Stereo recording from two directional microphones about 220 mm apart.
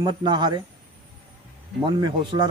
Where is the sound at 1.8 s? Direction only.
20° right (ahead or behind).